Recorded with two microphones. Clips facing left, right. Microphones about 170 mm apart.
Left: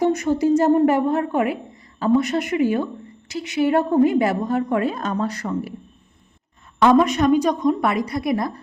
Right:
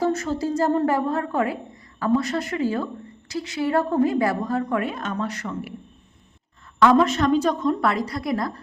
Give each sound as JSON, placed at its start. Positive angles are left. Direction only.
{"t": 0.0, "sound": "speech", "side_deg": 20}
{"t": 4.8, "sound": "speech", "side_deg": 35}
{"t": 6.9, "sound": "a woman's voice", "side_deg": 15}